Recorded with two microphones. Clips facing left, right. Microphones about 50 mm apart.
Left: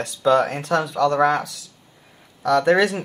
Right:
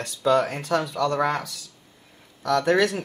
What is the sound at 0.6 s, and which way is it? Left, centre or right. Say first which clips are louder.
Speech: left 3 dB; left.